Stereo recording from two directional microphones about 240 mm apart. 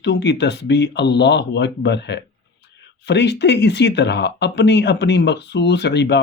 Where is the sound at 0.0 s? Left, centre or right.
Left.